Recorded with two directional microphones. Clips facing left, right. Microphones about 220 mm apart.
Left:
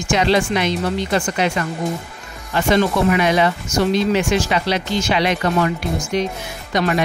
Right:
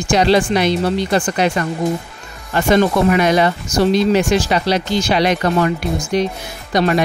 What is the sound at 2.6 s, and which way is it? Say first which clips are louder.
Speech: right 3 dB; 45° right (ahead or behind).